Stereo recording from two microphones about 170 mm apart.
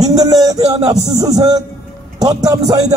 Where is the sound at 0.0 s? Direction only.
20° right (ahead or behind).